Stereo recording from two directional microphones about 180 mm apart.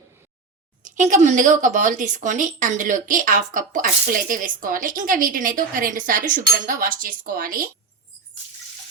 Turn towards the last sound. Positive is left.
turn(degrees=-50)  # may be behind; listen again after turning